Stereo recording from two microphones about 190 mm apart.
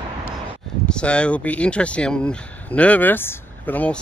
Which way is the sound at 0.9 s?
5° left (ahead or behind).